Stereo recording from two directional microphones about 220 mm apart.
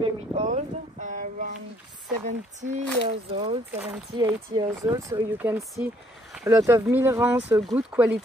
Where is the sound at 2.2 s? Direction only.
35° right (ahead or behind).